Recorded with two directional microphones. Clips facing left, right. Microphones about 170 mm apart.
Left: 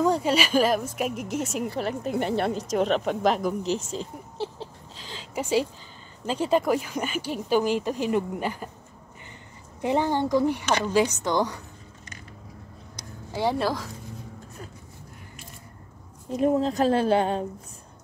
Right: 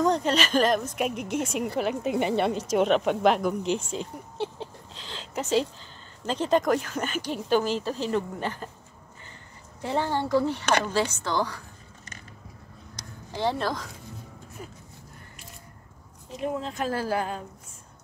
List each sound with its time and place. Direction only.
0.0 s speech: 5° left (ahead or behind)
9.8 s a woman's voice: 15° left (ahead or behind)
13.3 s speech: 10° left (ahead or behind)
16.3 s speech: 40° left (ahead or behind)
16.9 s a woman's voice: 25° left (ahead or behind)